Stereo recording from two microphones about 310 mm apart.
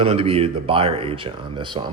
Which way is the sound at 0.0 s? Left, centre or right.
Centre.